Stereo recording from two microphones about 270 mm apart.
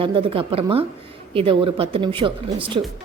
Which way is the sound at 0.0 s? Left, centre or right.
Centre.